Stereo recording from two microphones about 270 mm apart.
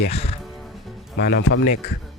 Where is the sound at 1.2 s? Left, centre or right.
Left.